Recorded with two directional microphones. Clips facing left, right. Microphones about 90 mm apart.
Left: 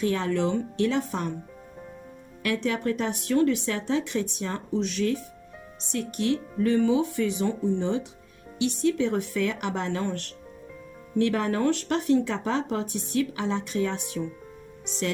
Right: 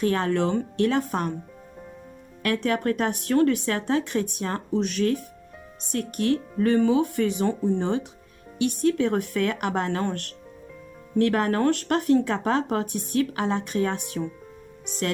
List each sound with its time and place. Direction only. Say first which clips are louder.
0.0 s speech: right 2 dB; 50° right (ahead or behind)
2.4 s speech: right 2 dB; 50° right (ahead or behind)